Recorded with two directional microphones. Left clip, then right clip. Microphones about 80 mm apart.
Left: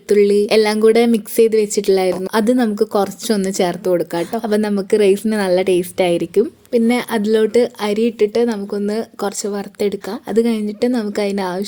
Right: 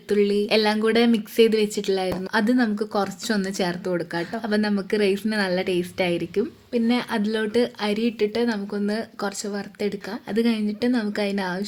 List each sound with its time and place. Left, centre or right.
0.1 s speech: left